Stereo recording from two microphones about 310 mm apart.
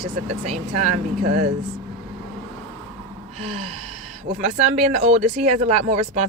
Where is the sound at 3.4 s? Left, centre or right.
Right.